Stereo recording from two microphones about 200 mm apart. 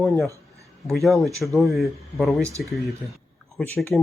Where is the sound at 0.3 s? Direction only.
15° right (ahead or behind).